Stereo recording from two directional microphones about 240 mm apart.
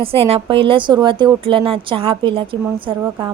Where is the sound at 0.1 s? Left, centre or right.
Right.